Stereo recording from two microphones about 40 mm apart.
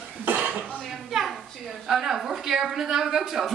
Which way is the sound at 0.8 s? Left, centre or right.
Centre.